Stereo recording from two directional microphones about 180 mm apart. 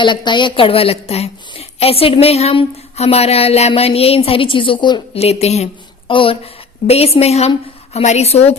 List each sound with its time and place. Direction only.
0.0 s a woman's voice: 25° left (ahead or behind)